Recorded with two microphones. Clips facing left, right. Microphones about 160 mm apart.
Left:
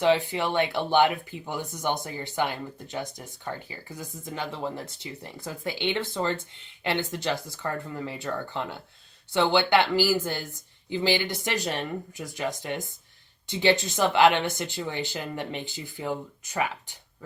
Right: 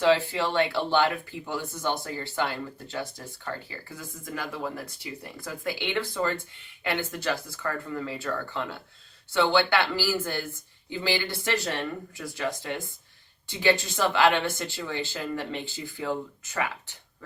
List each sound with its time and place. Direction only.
0.0 s speech: 15° left (ahead or behind)